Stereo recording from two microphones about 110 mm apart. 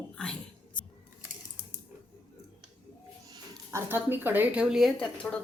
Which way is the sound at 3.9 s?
20° right (ahead or behind).